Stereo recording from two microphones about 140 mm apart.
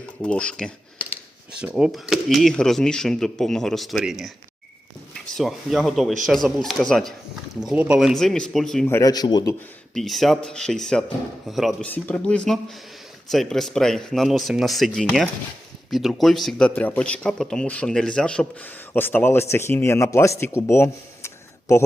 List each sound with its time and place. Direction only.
0.2 s speech: 10° left (ahead or behind)
1.7 s speech: centre (ahead or behind)
8.9 s a man's voice: 25° left (ahead or behind)
9.9 s speech: centre (ahead or behind)
11.9 s speech: 10° left (ahead or behind)
20.6 s a sound: 20° left (ahead or behind)